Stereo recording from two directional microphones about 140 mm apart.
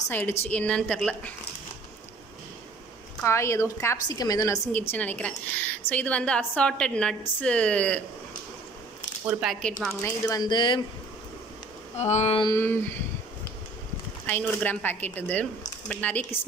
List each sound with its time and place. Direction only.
0.1 s a woman's voice: 15° left (ahead or behind)
3.3 s a woman's voice: 20° left (ahead or behind)
4.9 s a woman's voice: 10° left (ahead or behind)
9.2 s speech: 5° right (ahead or behind)
10.0 s a woman's voice: 25° left (ahead or behind)
12.0 s a sound: 50° left (ahead or behind)
12.5 s a woman's voice: 15° left (ahead or behind)
14.2 s a woman's voice: 15° left (ahead or behind)